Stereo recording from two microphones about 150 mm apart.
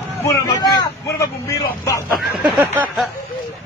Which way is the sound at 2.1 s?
Centre (ahead or behind).